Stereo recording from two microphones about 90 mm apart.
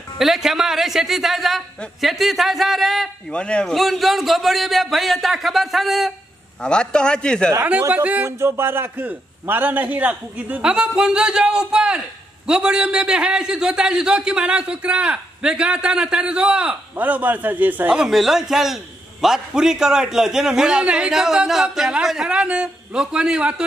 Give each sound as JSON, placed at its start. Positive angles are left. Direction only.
{"t": 0.2, "sound": "speech", "side_deg": -5}
{"t": 3.3, "sound": "a man's voice", "side_deg": 10}
{"t": 3.7, "sound": "speech", "side_deg": 0}
{"t": 6.6, "sound": "a man's voice", "side_deg": 10}
{"t": 7.9, "sound": "a man's voice", "side_deg": -15}
{"t": 8.3, "sound": "a man's voice", "side_deg": -30}
{"t": 17.9, "sound": "a man's voice", "side_deg": -5}